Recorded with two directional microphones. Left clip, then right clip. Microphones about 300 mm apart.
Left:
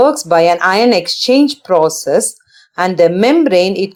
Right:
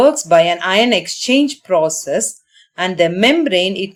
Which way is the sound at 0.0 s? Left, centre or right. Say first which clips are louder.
Left 1 dB; centre.